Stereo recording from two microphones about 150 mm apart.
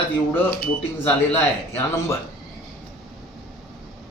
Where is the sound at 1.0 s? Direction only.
10° left (ahead or behind).